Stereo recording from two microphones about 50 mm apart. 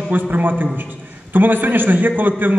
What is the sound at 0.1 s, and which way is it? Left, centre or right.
A man's voice, right.